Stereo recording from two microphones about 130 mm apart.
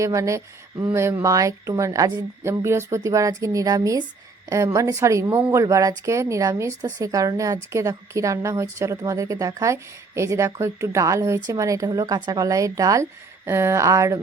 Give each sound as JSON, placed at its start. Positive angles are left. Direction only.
{"t": 0.0, "sound": "speech", "side_deg": -25}